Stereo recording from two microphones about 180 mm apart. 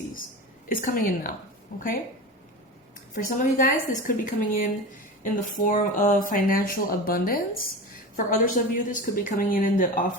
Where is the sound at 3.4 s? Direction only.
50° left (ahead or behind).